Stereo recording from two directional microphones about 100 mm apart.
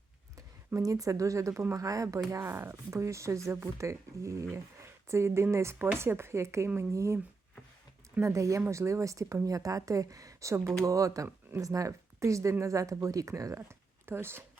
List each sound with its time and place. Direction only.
0.8 s speech: 35° right (ahead or behind)
8.2 s speech: 35° right (ahead or behind)